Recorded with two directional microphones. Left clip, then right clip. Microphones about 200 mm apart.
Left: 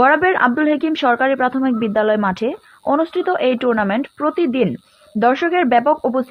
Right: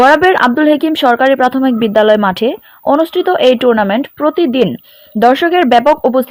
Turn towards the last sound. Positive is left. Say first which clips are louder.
# right 6 dB
turn(degrees=-45)  # may be behind; listen again after turning